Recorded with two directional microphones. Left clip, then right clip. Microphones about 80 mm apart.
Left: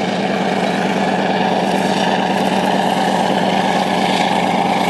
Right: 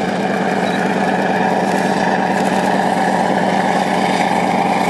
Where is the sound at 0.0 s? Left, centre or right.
Centre.